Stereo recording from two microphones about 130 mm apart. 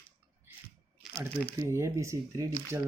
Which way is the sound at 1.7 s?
20° right (ahead or behind).